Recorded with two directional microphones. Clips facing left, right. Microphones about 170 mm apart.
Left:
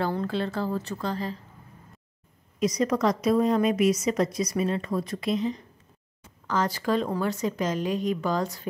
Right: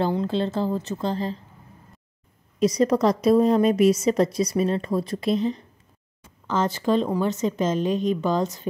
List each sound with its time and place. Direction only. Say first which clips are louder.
0.0 s a woman's voice: right 4 dB; 20° right (ahead or behind)
2.6 s a woman's voice: right 4 dB; 30° right (ahead or behind)